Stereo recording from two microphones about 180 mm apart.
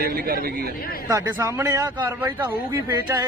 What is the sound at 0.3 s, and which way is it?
Speech, 55° right (ahead or behind).